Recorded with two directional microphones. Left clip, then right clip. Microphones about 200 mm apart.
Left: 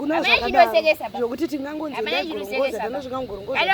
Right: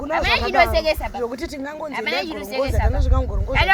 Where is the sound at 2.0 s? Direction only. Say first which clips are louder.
Right 1 dB; 10° right (ahead or behind).